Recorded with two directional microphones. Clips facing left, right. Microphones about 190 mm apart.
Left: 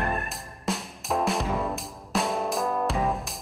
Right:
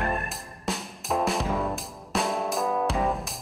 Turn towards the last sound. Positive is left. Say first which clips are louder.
# right 1 dB
turn(degrees=0)  # may be behind; listen again after turning